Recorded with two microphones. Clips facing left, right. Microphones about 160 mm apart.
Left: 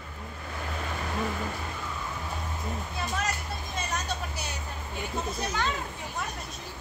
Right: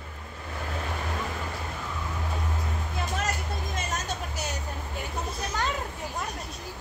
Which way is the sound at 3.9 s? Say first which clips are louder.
Even; 45° right (ahead or behind).